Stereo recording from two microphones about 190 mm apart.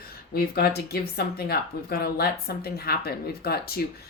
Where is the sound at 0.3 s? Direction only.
55° left (ahead or behind).